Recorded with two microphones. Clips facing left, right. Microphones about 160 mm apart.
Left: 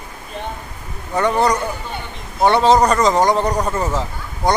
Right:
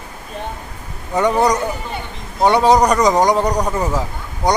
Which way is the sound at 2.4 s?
10° right (ahead or behind).